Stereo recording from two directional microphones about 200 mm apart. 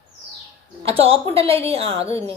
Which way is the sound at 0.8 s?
30° right (ahead or behind).